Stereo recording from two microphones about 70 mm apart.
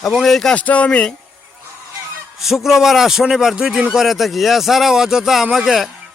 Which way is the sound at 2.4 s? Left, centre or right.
Centre.